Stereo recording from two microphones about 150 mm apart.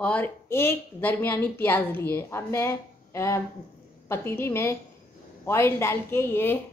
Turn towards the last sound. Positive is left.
turn(degrees=15)  # may be behind; listen again after turning